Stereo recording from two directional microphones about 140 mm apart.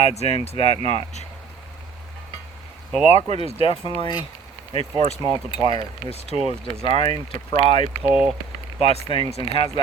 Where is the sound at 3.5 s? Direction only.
45° left (ahead or behind).